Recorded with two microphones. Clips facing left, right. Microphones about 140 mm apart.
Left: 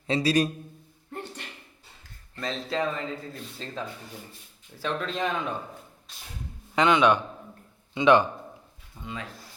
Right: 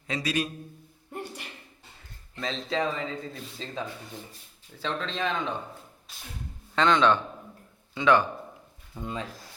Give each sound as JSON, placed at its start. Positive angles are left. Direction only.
{"t": 0.1, "sound": "a man's voice", "side_deg": 30}
{"t": 1.1, "sound": "a sound", "side_deg": -10}
{"t": 2.4, "sound": "a man's voice", "side_deg": 0}
{"t": 6.7, "sound": "speech", "side_deg": 10}
{"t": 9.0, "sound": "speech", "side_deg": -80}